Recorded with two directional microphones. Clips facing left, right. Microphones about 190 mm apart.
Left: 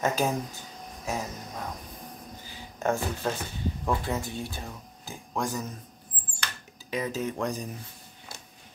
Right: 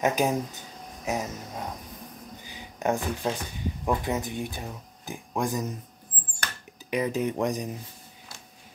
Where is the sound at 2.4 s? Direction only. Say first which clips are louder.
Right 1 dB; 15° right (ahead or behind).